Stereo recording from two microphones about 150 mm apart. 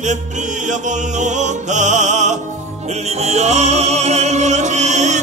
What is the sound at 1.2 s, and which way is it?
Music, 55° right (ahead or behind).